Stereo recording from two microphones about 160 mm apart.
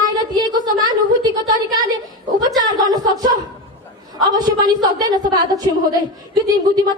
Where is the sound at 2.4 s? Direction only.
25° right (ahead or behind).